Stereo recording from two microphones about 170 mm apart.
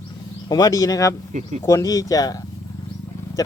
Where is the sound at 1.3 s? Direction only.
50° right (ahead or behind).